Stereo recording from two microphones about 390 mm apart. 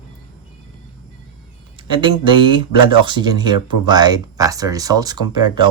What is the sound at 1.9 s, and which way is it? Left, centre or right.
Speech, centre.